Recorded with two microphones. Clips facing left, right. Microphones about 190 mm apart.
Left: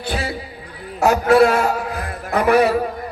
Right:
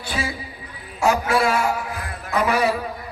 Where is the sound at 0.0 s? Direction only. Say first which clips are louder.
Left 3 dB; 65° left (ahead or behind).